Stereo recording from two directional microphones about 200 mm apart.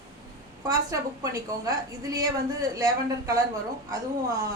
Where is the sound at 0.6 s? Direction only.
15° right (ahead or behind).